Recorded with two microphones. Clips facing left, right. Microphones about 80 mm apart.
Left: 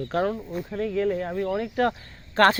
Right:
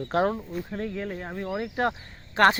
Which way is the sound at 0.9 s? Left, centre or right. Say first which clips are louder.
Left 8 dB; centre.